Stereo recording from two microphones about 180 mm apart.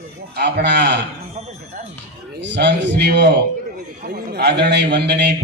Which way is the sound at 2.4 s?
75° right (ahead or behind).